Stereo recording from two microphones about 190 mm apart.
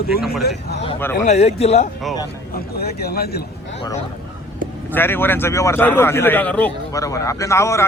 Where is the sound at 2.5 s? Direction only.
55° left (ahead or behind).